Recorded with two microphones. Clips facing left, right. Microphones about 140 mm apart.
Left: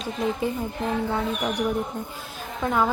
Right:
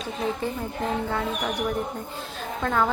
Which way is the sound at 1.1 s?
20° left (ahead or behind).